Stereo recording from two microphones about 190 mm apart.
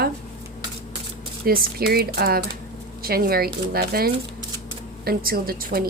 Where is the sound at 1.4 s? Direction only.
50° right (ahead or behind).